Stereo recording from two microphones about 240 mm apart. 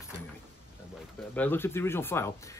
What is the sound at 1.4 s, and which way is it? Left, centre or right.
Speech, centre.